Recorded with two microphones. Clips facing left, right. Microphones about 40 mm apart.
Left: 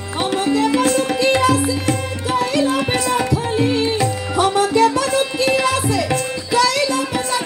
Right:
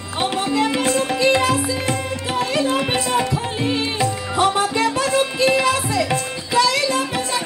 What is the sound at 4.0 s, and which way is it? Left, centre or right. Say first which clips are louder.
Music: left 1 dB; right.